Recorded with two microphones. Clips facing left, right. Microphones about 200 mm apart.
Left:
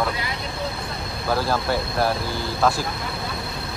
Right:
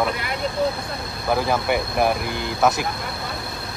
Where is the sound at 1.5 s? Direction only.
15° right (ahead or behind).